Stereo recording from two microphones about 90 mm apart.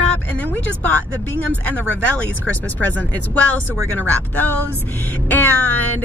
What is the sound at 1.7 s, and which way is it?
Speech, 20° left (ahead or behind).